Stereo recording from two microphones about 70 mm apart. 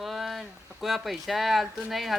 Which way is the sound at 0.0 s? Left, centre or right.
Centre.